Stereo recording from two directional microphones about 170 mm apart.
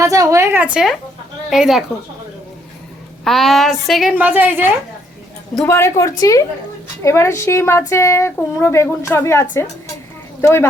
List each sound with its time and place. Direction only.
0.0 s a woman's voice: 20° right (ahead or behind); by 1.8 s centre (ahead or behind)
3.2 s a woman's voice: centre (ahead or behind)
5.6 s speech: 15° left (ahead or behind)